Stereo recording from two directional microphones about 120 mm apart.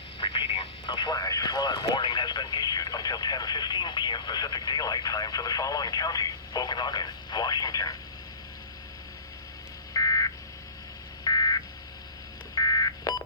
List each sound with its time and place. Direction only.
0.2 s speech: 50° left (ahead or behind); by 7.9 s 30° left (ahead or behind)
9.9 s buzzer: 30° left (ahead or behind)
12.5 s a sound: 35° left (ahead or behind)